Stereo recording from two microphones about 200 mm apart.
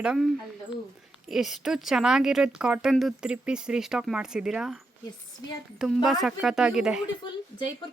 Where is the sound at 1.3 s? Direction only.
Centre (ahead or behind).